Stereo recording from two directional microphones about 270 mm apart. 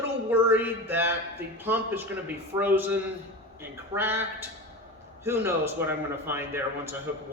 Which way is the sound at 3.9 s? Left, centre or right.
Centre.